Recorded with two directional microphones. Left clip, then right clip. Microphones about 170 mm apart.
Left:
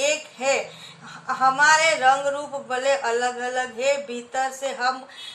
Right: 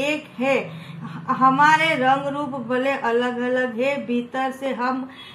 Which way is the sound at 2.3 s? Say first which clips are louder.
Right 3 dB; 60° left (ahead or behind).